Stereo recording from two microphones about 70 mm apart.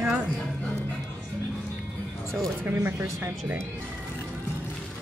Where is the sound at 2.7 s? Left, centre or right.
Right.